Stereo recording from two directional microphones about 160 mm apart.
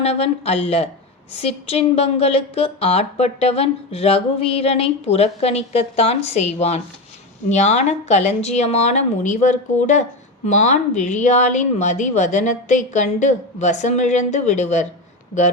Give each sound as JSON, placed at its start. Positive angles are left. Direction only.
{"t": 0.0, "sound": "a woman's voice", "side_deg": 40}